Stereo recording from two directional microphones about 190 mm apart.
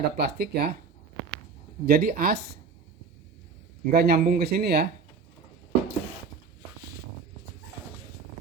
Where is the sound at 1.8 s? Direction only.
50° right (ahead or behind).